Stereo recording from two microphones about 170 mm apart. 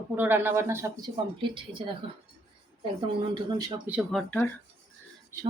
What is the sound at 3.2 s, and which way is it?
Speech, 30° right (ahead or behind).